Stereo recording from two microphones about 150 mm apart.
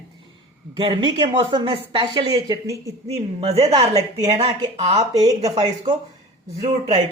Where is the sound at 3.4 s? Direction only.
45° right (ahead or behind).